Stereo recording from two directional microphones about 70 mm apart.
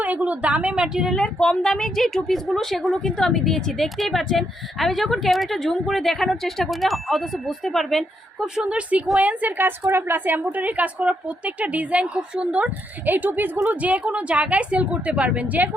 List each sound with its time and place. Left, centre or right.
0.0 s a woman's voice: right
1.1 s a woman's voice: centre
8.5 s a woman's voice: centre